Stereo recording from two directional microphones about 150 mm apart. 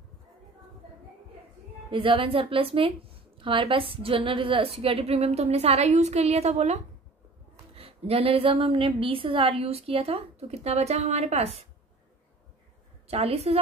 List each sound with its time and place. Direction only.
1.9 s a woman's voice: 35° right (ahead or behind)
13.1 s a woman's voice: 40° right (ahead or behind)